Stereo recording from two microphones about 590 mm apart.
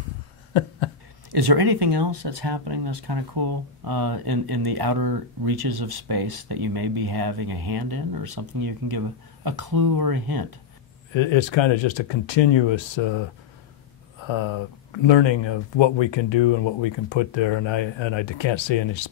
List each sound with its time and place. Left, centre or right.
0.5 s a sound: left
1.3 s speech: right
11.1 s speech: left
14.2 s speech: left